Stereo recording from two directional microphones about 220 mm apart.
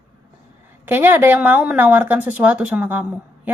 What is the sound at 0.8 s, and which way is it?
Speech, 10° right (ahead or behind).